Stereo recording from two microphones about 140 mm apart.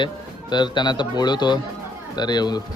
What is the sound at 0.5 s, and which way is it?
A man's voice, 30° left (ahead or behind).